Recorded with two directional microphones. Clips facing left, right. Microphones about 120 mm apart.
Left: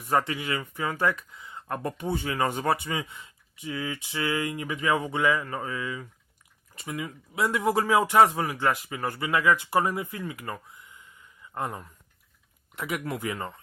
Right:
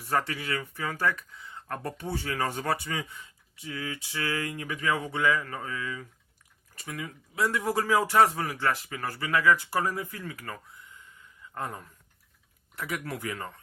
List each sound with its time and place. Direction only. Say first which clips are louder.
0.0 s speech: left 3 dB; 15° left (ahead or behind)